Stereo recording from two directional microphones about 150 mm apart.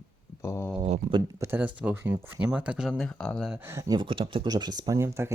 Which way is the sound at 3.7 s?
20° right (ahead or behind).